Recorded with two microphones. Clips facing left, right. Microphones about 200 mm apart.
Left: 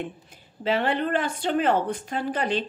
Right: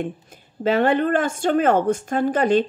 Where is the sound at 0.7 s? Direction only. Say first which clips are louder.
Right 6 dB; 45° right (ahead or behind).